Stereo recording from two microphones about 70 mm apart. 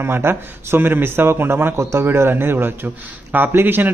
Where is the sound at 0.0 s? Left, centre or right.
Right.